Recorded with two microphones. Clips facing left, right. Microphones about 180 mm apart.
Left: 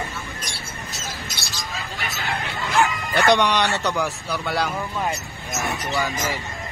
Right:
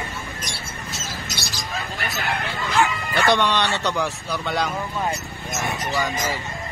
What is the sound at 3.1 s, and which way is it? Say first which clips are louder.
Speech: left 2 dB; 15° left (ahead or behind).